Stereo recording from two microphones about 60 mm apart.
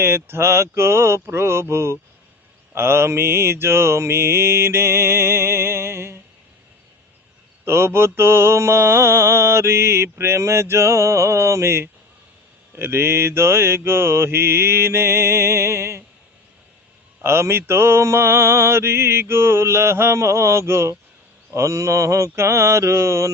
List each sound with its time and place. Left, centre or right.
0.0 s mantra: right
7.6 s mantra: right
17.2 s mantra: right